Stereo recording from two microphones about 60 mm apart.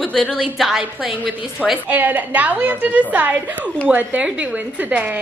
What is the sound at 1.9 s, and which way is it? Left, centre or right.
A woman's voice, right.